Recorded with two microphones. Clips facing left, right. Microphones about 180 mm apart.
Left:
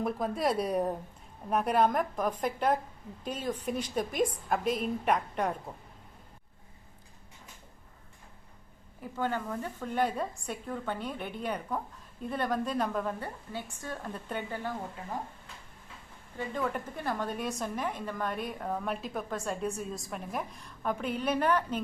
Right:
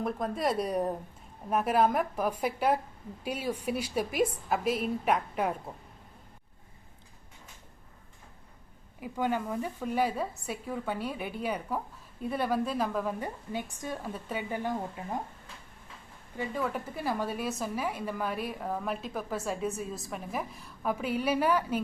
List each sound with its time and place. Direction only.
0.0 s a woman's voice: centre (ahead or behind)
9.0 s a woman's voice: 10° right (ahead or behind)
13.1 s a woman's voice: 15° right (ahead or behind)
14.5 s a woman's voice: 15° right (ahead or behind)
16.4 s a woman's voice: 5° right (ahead or behind)